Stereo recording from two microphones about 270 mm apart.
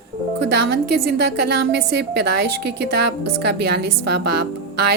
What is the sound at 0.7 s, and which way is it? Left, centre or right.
A woman's voice, right.